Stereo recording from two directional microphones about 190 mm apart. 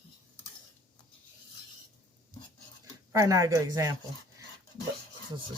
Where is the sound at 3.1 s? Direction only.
15° right (ahead or behind).